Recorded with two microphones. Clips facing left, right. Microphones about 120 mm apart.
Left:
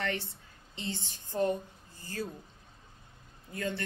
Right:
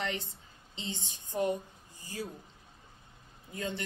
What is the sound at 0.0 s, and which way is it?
A woman's voice, 20° right (ahead or behind).